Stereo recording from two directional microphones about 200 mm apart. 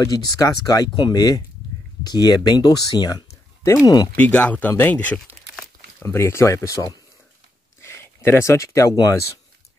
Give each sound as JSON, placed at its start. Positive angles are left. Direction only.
{"t": 0.0, "sound": "speech", "side_deg": 20}
{"t": 4.1, "sound": "speech", "side_deg": 5}